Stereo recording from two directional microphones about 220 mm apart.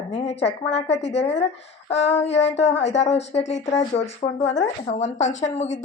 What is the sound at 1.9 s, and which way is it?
Speech, 30° left (ahead or behind).